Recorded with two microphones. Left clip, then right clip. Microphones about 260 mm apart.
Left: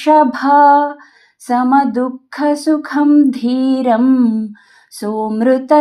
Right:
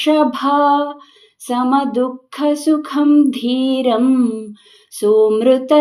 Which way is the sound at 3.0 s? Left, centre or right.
Centre.